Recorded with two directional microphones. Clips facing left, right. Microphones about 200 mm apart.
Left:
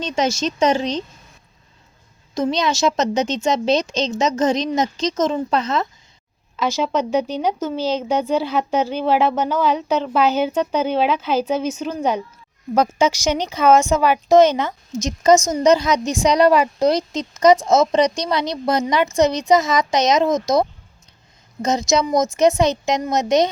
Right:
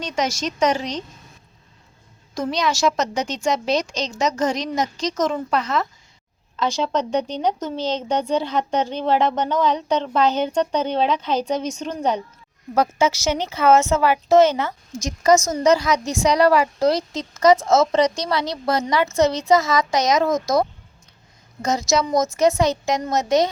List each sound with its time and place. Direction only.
0.0 s a woman's voice: 25° left (ahead or behind)
2.3 s a woman's voice: 20° left (ahead or behind)
6.6 s speech: 5° left (ahead or behind)
12.7 s a woman's voice: 15° left (ahead or behind)